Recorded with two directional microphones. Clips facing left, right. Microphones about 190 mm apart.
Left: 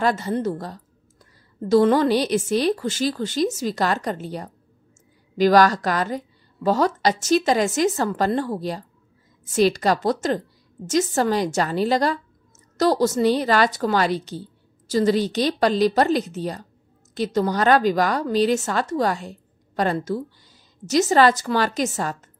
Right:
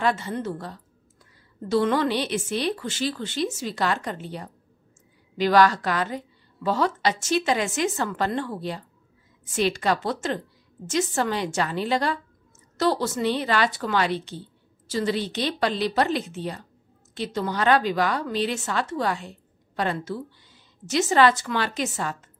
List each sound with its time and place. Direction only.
0.0 s a woman's voice: 40° left (ahead or behind)